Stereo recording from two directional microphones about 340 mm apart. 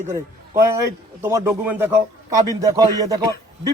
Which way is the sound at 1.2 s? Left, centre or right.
Centre.